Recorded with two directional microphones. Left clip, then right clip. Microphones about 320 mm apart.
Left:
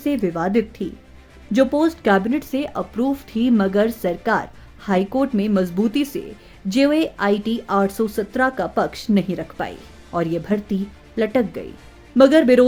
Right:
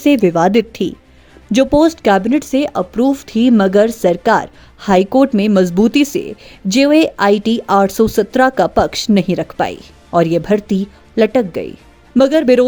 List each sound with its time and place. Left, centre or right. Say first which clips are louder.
0.0 s speech: right 10 dB; right